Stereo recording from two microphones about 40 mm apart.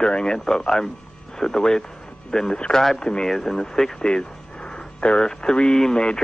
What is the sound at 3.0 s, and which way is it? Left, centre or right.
Speech, left.